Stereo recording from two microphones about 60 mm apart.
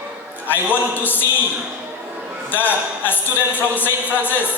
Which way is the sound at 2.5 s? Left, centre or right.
Left.